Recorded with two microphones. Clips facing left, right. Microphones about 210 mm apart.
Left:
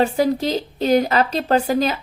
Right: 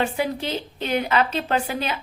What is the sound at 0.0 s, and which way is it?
A woman's voice, 40° left (ahead or behind).